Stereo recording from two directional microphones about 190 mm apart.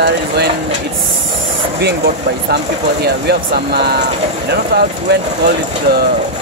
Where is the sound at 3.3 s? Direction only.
60° right (ahead or behind).